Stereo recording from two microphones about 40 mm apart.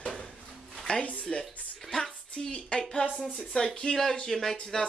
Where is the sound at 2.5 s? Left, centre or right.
Left.